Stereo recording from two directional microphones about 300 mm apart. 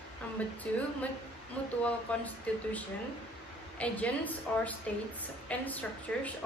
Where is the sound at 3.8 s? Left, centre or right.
Centre.